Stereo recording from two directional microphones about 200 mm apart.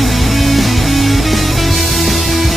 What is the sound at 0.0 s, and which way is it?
Music, centre (ahead or behind).